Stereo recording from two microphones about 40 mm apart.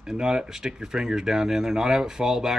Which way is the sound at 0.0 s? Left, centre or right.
Centre.